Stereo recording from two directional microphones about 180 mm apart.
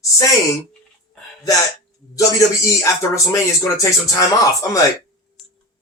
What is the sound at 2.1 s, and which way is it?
Speech, 20° left (ahead or behind).